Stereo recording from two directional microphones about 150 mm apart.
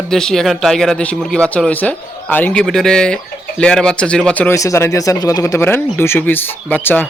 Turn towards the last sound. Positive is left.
turn(degrees=10)  # may be behind; listen again after turning